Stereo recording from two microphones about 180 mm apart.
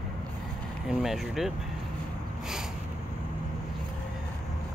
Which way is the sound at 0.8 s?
Centre (ahead or behind).